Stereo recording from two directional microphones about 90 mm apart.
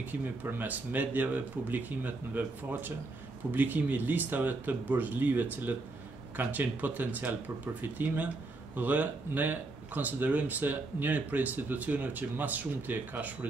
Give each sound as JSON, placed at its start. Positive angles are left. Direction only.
{"t": 0.0, "sound": "speech", "side_deg": -20}